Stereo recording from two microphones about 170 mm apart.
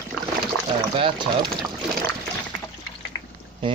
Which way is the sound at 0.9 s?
30° right (ahead or behind).